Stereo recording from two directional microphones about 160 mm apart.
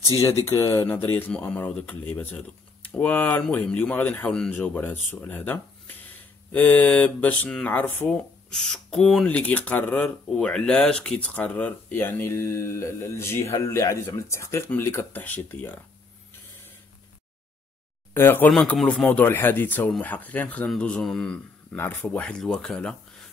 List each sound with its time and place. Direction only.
0.5 s speech: 15° left (ahead or behind)
18.1 s speech: 15° left (ahead or behind)
18.5 s speech: centre (ahead or behind)